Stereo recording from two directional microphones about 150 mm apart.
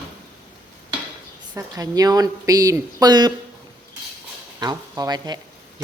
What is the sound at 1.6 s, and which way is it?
Speech, 25° right (ahead or behind).